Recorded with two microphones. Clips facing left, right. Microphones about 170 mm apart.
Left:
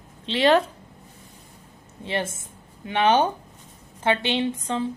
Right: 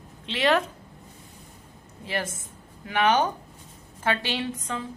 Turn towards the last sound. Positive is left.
turn(degrees=30)  # may be behind; listen again after turning